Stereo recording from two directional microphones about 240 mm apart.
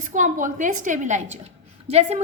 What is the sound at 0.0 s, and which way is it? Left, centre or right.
A woman's voice, right.